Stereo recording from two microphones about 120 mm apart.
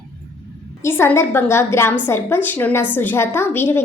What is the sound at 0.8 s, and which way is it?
A woman's voice, 20° left (ahead or behind).